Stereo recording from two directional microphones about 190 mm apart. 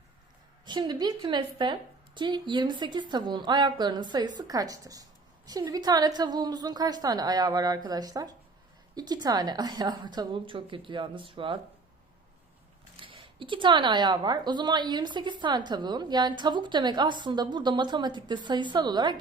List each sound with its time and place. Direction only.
0.6 s speech: 20° right (ahead or behind)
13.0 s speech: 25° right (ahead or behind)